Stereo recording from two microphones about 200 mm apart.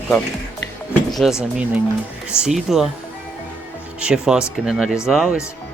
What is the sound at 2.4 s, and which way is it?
Speech, centre (ahead or behind).